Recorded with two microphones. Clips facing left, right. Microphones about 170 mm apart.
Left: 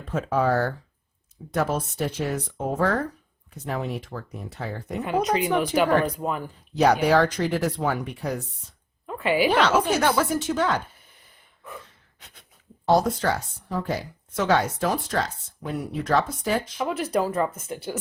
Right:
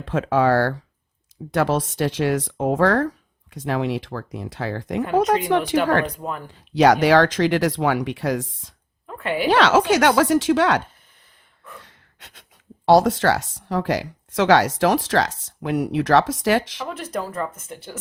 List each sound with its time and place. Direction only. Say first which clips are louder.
0.0 s speech: right 5 dB; 90° right
5.7 s speech: even; 75° right (ahead or behind)
6.1 s speech: left 2 dB; 5° left (ahead or behind)
6.5 s speech: right 5 dB; 90° right
9.0 s a sound: left 2 dB; 5° left (ahead or behind)
9.5 s speech: right 9 dB; 85° right
16.9 s speech: left 4 dB; 10° left (ahead or behind)